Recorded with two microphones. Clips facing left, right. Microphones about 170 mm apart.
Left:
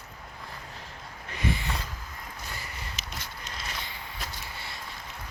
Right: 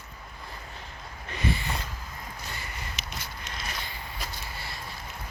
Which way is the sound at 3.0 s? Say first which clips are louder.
Right 1 dB; 35° left (ahead or behind).